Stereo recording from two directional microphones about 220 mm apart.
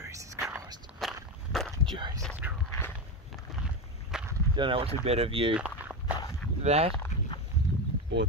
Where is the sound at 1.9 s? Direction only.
20° right (ahead or behind).